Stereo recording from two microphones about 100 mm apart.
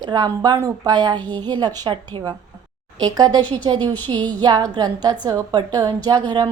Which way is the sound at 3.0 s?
40° right (ahead or behind).